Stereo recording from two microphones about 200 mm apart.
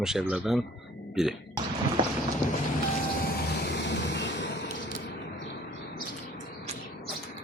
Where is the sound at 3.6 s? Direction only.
60° left (ahead or behind).